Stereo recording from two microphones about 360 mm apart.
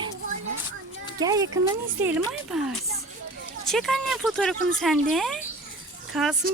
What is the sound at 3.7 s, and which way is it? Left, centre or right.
Speech, centre.